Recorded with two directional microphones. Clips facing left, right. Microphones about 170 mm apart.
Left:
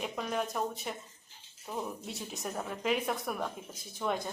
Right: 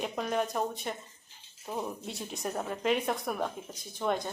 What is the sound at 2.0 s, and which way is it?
A woman's voice, centre (ahead or behind).